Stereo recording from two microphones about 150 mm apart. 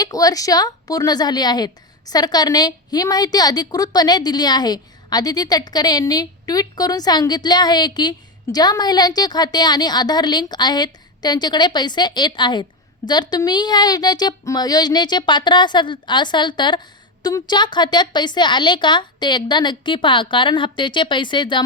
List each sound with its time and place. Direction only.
0.0 s a woman's voice: 25° left (ahead or behind)